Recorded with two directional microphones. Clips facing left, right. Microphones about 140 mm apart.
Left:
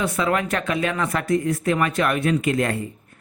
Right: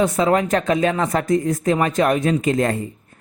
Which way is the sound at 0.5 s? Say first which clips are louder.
Right 5 dB; 40° right (ahead or behind).